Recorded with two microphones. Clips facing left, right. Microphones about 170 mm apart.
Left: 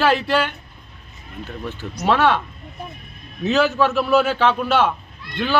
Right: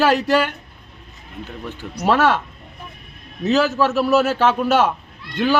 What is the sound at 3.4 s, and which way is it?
Speech, centre (ahead or behind).